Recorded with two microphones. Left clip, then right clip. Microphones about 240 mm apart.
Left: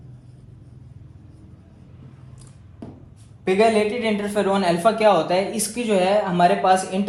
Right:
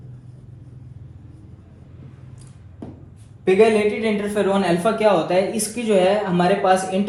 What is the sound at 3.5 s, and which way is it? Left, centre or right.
A man's voice, left.